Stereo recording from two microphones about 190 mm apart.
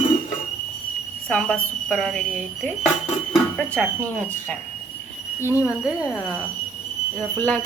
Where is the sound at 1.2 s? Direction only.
5° left (ahead or behind).